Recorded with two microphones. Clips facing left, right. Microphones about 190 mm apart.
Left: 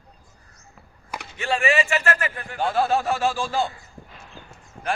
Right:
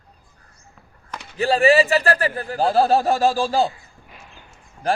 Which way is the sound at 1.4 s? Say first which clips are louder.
Right 7 dB; 35° right (ahead or behind).